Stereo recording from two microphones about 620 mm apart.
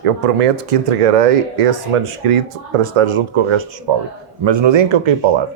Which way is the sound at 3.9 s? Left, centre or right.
Right.